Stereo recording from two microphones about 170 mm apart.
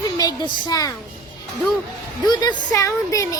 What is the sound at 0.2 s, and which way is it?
Speech, 25° left (ahead or behind).